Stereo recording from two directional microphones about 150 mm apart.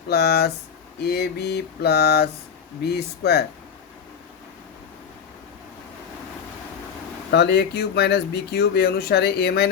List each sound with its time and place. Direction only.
0.1 s speech: 90° left
7.3 s speech: 90° left